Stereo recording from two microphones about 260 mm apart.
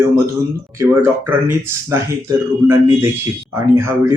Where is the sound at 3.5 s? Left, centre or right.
Centre.